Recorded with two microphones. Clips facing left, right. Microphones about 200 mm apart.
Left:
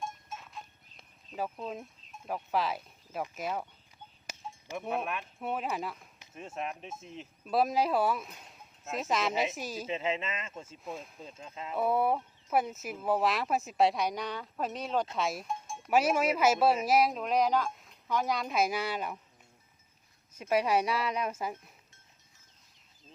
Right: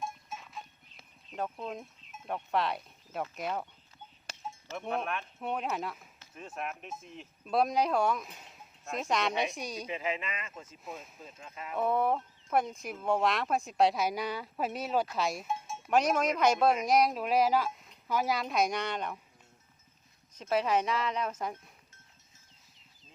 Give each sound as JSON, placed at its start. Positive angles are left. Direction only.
{"t": 0.0, "sound": "livestock", "side_deg": -5}
{"t": 2.2, "sound": "speech", "side_deg": 5}
{"t": 4.7, "sound": "speech", "side_deg": 5}
{"t": 6.1, "sound": "speech", "side_deg": 25}
{"t": 7.4, "sound": "speech", "side_deg": 5}
{"t": 9.8, "sound": "speech", "side_deg": 25}
{"t": 10.8, "sound": "speech", "side_deg": 0}
{"t": 11.4, "sound": "speech", "side_deg": 25}
{"t": 11.8, "sound": "speech", "side_deg": 5}
{"t": 15.1, "sound": "cowbell", "side_deg": 0}
{"t": 15.9, "sound": "speech", "side_deg": 5}
{"t": 20.3, "sound": "speech", "side_deg": 10}